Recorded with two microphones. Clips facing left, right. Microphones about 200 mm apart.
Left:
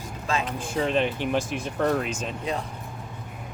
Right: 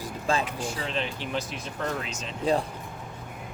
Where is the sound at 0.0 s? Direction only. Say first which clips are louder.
Right 1 dB; 30° right (ahead or behind).